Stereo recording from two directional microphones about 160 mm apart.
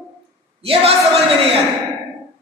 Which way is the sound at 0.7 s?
40° right (ahead or behind).